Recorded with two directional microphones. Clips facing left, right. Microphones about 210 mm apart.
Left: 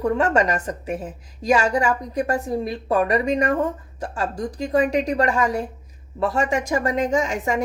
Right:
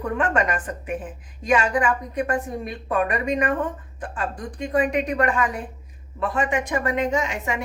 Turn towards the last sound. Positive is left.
turn(degrees=45)  # may be behind; listen again after turning